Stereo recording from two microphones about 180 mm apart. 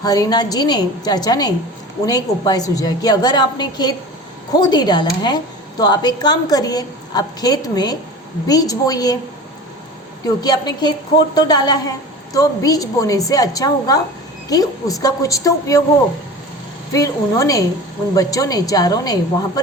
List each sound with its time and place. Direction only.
0.0 s a woman's voice: 20° left (ahead or behind)
10.4 s a woman's voice: 25° left (ahead or behind)
16.9 s a woman's voice: 20° left (ahead or behind)